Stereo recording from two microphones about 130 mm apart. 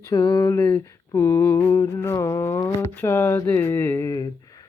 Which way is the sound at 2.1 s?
20° left (ahead or behind).